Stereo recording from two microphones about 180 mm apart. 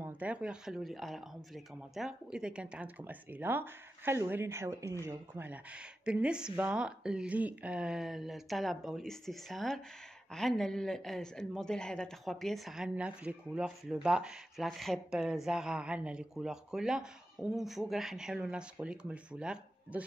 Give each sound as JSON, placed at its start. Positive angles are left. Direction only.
{"t": 0.0, "sound": "speech", "side_deg": -10}